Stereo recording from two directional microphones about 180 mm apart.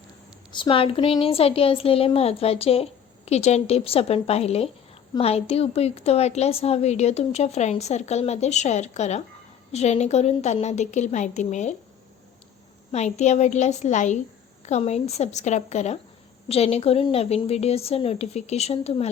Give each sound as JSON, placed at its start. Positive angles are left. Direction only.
{"t": 0.5, "sound": "a woman's voice", "side_deg": 30}
{"t": 12.9, "sound": "a woman's voice", "side_deg": 40}